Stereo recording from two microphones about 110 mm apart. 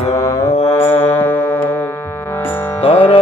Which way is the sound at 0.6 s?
65° left (ahead or behind).